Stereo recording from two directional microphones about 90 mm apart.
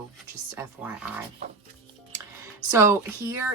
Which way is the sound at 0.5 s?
10° right (ahead or behind).